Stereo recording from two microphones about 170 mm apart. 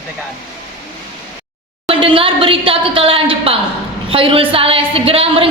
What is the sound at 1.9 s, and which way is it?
A woman's voice, 30° right (ahead or behind).